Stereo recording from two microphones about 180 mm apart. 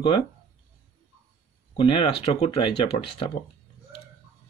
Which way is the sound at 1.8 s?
30° left (ahead or behind).